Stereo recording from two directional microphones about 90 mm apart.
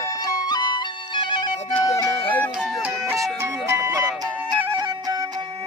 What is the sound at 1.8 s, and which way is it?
Music, 40° left (ahead or behind).